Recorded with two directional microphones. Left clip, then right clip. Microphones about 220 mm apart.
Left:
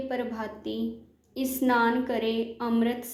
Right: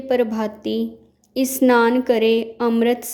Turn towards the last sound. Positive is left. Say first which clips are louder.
# right 10 dB
turn(degrees=-50)  # may be behind; listen again after turning